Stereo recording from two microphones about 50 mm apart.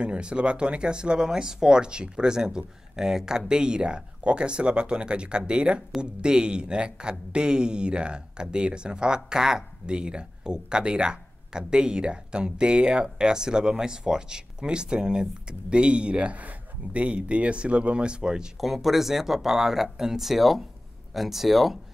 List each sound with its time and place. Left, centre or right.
0.0 s a man's voice: centre
18.6 s speech: centre